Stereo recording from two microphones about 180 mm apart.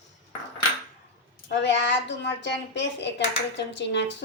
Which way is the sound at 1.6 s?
75° left (ahead or behind).